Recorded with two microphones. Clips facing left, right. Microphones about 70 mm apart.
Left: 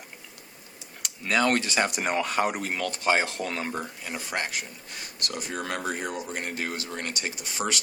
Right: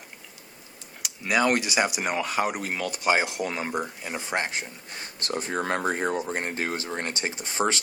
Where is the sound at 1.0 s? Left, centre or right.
Centre.